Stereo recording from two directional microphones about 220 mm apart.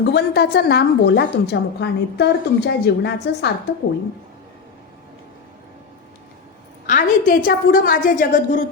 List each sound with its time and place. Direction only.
0.0 s a woman's voice: 50° left (ahead or behind)
6.8 s a woman's voice: 35° left (ahead or behind)